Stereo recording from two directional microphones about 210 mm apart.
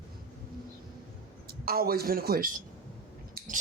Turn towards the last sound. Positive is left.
turn(degrees=-45)  # may be behind; listen again after turning